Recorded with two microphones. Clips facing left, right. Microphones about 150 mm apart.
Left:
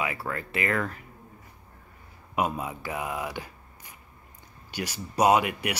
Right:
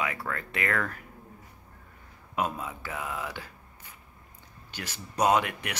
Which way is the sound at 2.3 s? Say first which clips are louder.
Left 3 dB; 15° left (ahead or behind).